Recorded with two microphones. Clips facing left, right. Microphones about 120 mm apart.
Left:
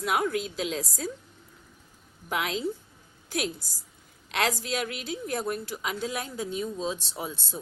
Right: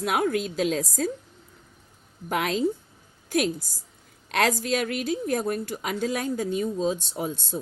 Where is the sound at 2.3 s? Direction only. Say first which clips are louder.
Right 5 dB; 50° right (ahead or behind).